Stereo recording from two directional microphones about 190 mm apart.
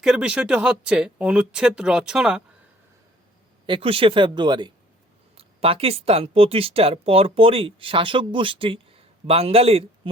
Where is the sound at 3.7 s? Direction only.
30° right (ahead or behind).